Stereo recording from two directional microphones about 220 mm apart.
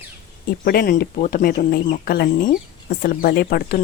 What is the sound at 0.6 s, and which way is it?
Speech, 45° left (ahead or behind).